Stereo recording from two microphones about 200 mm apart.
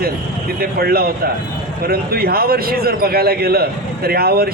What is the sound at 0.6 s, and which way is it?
A man's voice, 50° right (ahead or behind).